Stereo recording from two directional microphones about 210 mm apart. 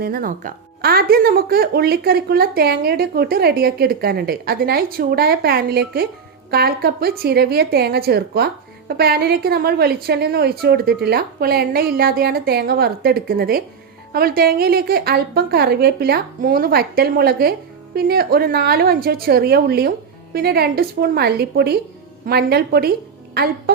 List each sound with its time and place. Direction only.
0.0 s a woman's voice: 45° right (ahead or behind)